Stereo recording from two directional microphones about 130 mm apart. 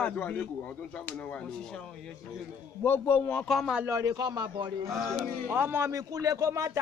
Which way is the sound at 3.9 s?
25° right (ahead or behind).